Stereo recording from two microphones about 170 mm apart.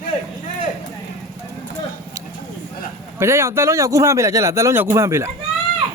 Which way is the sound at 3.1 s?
15° right (ahead or behind).